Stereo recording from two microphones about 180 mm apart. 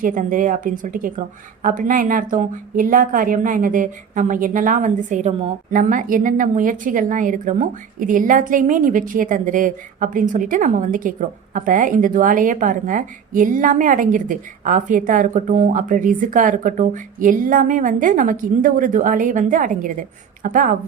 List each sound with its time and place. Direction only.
0.0 s a woman's voice: 45° right (ahead or behind)
5.3 s a woman's voice: 30° right (ahead or behind)
5.7 s a woman's voice: 45° right (ahead or behind)